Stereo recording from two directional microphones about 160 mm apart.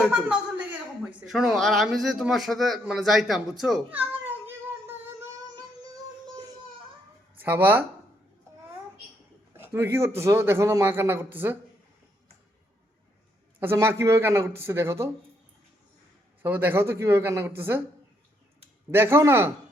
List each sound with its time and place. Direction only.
0.1 s speech: 10° right (ahead or behind)
4.3 s child singing: 15° right (ahead or behind)
7.4 s speech: 10° right (ahead or behind)
9.6 s speech: 15° right (ahead or behind)
13.6 s speech: 15° right (ahead or behind)
16.4 s speech: 10° right (ahead or behind)
18.9 s speech: 15° right (ahead or behind)